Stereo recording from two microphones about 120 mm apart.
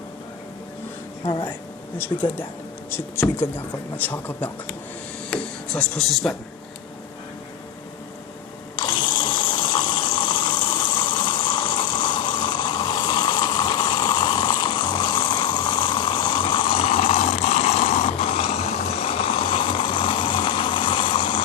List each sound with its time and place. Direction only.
1.2 s speech: 45° left (ahead or behind)
2.9 s a man's voice: 20° left (ahead or behind); by 6.3 s centre (ahead or behind)
8.7 s water: 40° left (ahead or behind)